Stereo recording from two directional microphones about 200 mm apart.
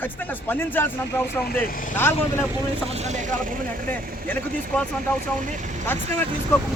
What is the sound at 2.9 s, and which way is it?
Speech, 35° right (ahead or behind).